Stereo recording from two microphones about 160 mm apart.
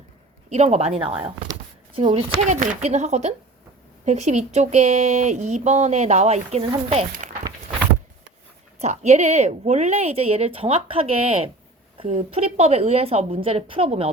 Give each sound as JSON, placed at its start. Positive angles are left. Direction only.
{"t": 0.5, "sound": "speech", "side_deg": -40}
{"t": 2.4, "sound": "speech", "side_deg": -50}
{"t": 7.2, "sound": "a sound", "side_deg": -50}
{"t": 8.8, "sound": "speech", "side_deg": -45}